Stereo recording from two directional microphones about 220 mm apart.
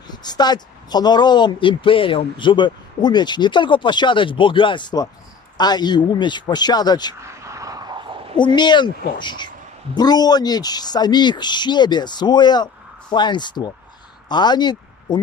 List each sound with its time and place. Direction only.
0.1 s speech: 20° left (ahead or behind)
7.2 s vehicle: 15° right (ahead or behind)
8.4 s speech: 20° left (ahead or behind)